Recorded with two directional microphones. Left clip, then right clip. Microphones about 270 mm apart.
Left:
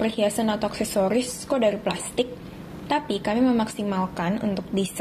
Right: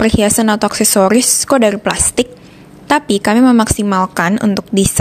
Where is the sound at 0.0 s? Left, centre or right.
Right.